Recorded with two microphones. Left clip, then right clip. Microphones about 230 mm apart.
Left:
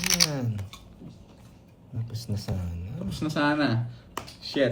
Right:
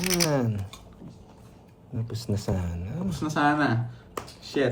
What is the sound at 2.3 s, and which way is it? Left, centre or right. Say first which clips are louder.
Speech: right 7 dB; right.